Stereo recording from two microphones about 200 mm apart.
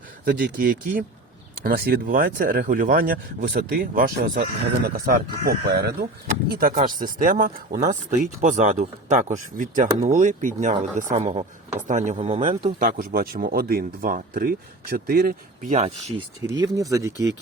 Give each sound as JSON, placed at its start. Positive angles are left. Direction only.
{"t": 0.3, "sound": "speech", "side_deg": -50}
{"t": 12.8, "sound": "speech", "side_deg": -45}
{"t": 16.5, "sound": "speech", "side_deg": -20}